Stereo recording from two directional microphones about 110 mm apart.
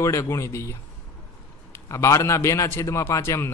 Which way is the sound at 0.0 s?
25° left (ahead or behind).